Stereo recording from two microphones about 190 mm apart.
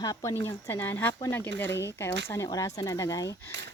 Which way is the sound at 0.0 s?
20° left (ahead or behind).